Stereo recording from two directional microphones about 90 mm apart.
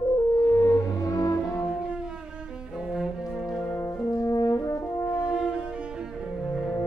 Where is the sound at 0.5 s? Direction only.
40° left (ahead or behind).